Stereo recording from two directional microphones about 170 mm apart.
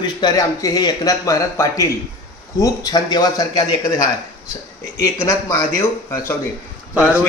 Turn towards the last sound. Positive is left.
turn(degrees=-5)  # may be behind; listen again after turning